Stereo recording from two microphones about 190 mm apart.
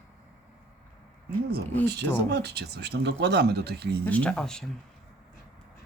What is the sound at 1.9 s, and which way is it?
Speech, 60° right (ahead or behind).